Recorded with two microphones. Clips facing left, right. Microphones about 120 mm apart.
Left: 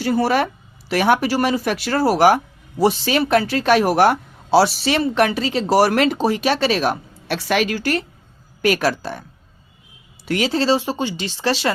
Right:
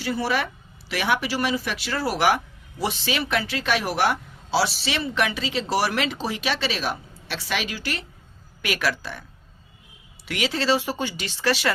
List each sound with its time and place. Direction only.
0.0 s speech: 45° left (ahead or behind)
10.2 s speech: 35° left (ahead or behind)